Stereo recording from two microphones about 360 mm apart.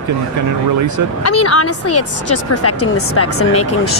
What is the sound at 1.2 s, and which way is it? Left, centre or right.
Speech, left.